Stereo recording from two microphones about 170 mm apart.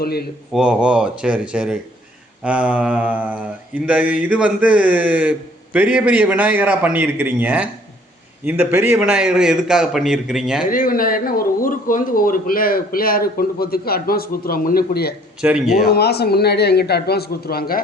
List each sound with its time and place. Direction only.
0.0 s a man's voice: 65° left (ahead or behind)
0.5 s a man's voice: 5° right (ahead or behind)
10.7 s speech: 55° left (ahead or behind)
15.4 s a man's voice: 5° right (ahead or behind)
15.9 s a man's voice: 70° left (ahead or behind)